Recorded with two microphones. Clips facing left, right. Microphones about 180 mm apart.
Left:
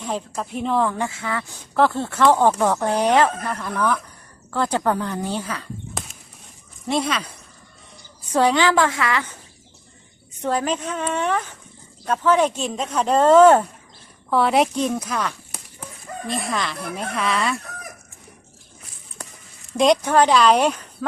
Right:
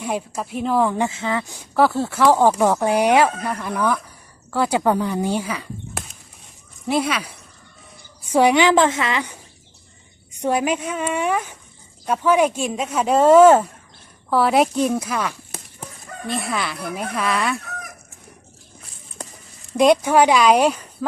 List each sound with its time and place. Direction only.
0.0 s speech: 10° right (ahead or behind)
0.9 s speech: 20° right (ahead or behind); by 17.6 s centre (ahead or behind)
19.7 s speech: 5° right (ahead or behind)